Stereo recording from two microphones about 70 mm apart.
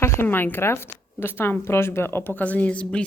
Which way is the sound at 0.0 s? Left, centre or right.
Left.